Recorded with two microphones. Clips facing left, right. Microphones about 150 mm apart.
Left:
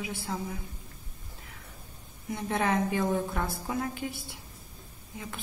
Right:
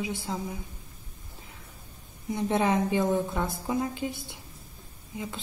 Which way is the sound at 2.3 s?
20° right (ahead or behind).